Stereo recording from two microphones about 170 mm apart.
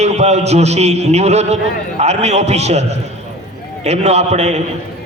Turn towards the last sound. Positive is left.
turn(degrees=-40)  # may be behind; listen again after turning